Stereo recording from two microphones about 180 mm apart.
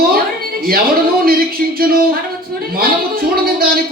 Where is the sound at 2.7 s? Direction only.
55° right (ahead or behind).